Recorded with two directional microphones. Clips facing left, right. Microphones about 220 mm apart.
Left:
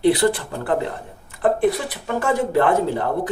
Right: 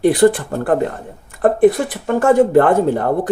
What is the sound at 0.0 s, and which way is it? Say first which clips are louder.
Speech: right 5 dB; 50° right (ahead or behind).